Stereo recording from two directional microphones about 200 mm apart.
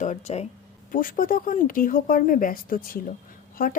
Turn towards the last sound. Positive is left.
turn(degrees=45)  # may be behind; listen again after turning